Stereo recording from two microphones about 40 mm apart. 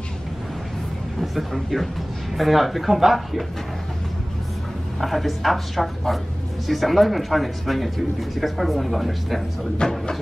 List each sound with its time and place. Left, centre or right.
1.2 s speech: centre
5.0 s speech: centre
9.8 s speech: left